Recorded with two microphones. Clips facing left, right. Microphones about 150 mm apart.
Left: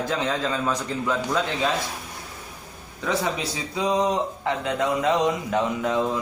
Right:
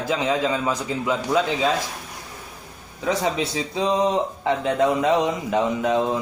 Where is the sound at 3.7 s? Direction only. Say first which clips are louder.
Right 1 dB; 25° right (ahead or behind).